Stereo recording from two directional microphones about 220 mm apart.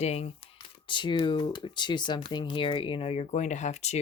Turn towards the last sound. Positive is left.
turn(degrees=30)  # may be behind; listen again after turning